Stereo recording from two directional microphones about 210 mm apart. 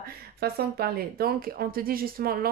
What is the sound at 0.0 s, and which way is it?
Speech, 45° right (ahead or behind).